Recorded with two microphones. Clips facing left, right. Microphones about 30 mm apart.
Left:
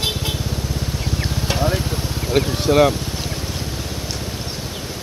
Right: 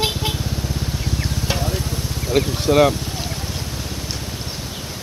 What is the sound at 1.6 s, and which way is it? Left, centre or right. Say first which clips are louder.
Vehicle: left 4 dB; left.